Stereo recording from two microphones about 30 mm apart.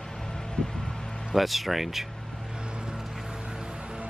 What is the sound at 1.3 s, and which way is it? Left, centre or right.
Speech, centre.